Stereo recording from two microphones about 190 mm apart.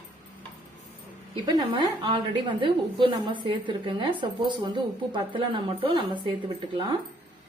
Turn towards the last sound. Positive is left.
turn(degrees=-25)  # may be behind; listen again after turning